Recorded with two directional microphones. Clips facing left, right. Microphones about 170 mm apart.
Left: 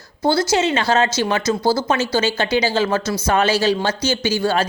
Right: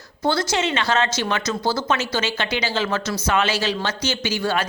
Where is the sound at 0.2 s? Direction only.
30° left (ahead or behind).